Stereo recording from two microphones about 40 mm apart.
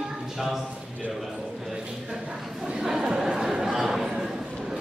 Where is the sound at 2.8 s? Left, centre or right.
Centre.